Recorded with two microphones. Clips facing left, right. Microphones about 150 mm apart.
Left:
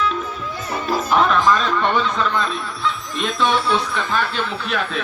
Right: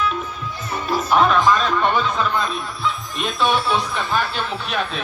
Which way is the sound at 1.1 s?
Centre (ahead or behind).